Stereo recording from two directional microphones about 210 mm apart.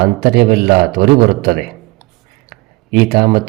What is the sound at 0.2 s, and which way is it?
Speech, 50° right (ahead or behind).